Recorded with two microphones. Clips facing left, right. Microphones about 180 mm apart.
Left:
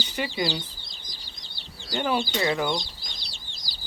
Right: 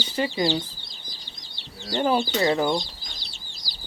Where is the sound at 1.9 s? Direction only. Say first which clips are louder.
Right 4 dB; 35° right (ahead or behind).